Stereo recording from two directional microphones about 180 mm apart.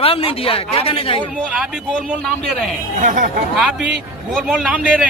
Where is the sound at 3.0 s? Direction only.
45° right (ahead or behind).